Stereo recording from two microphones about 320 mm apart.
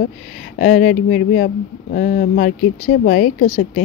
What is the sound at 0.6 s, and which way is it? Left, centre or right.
Speech, left.